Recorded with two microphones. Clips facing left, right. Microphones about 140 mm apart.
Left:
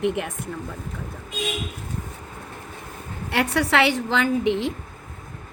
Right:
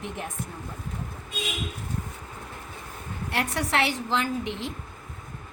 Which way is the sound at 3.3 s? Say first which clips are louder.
Left 6 dB; 70° left (ahead or behind).